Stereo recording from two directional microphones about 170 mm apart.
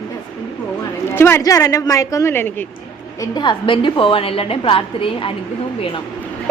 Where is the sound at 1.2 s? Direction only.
15° left (ahead or behind).